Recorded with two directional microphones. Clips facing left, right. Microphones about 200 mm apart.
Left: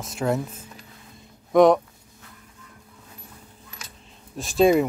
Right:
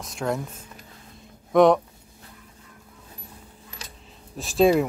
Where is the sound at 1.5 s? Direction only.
Centre (ahead or behind).